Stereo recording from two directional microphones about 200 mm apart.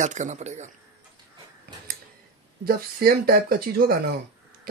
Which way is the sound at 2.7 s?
50° right (ahead or behind).